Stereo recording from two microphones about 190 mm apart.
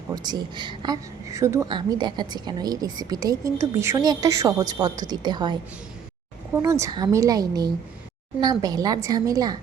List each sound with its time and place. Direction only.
0.1 s a woman's voice: 20° right (ahead or behind)